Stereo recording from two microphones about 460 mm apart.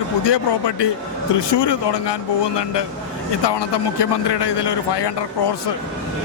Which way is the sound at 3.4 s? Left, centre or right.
Left.